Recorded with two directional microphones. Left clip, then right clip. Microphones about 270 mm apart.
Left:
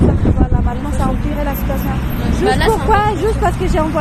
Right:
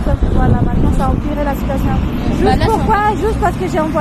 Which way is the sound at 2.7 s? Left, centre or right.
Centre.